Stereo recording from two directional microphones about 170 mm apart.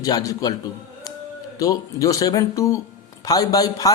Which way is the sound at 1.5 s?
20° left (ahead or behind).